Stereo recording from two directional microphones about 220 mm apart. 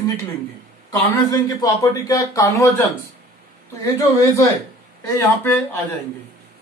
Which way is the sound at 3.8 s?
15° left (ahead or behind).